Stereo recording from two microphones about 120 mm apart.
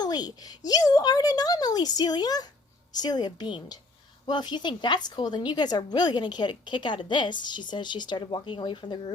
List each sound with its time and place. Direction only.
0.0 s a woman's voice: 35° left (ahead or behind)